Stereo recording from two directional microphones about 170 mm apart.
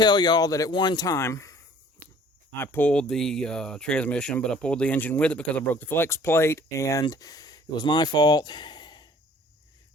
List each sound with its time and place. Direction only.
0.0 s speech: 25° left (ahead or behind)